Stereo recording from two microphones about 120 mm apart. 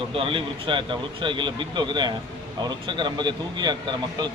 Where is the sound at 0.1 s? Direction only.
45° right (ahead or behind).